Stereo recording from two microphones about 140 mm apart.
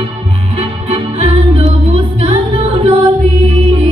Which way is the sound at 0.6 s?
50° right (ahead or behind).